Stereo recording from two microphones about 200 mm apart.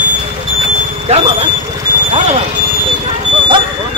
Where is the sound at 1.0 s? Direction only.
30° right (ahead or behind).